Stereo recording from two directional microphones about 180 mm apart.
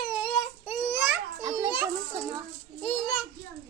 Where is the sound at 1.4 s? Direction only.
20° right (ahead or behind).